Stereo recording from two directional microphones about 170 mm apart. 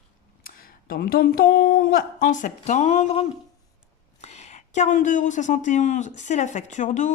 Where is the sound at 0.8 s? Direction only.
60° left (ahead or behind); by 3.2 s 40° left (ahead or behind).